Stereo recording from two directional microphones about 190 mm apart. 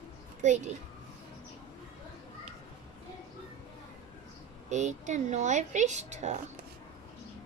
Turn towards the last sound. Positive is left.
turn(degrees=-35)  # may be behind; listen again after turning